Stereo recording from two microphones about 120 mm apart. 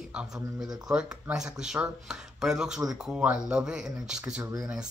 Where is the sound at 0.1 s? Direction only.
5° right (ahead or behind).